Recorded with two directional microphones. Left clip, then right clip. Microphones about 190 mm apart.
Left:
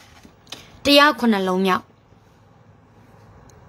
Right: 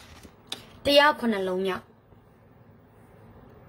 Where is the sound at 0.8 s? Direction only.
20° left (ahead or behind).